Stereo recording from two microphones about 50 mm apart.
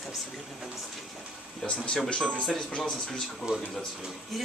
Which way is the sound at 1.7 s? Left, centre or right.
Left.